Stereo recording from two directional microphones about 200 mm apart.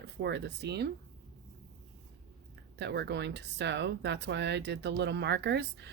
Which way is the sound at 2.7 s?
60° right (ahead or behind).